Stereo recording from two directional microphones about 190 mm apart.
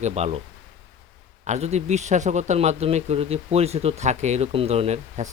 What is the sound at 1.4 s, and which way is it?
A man's voice, 35° right (ahead or behind).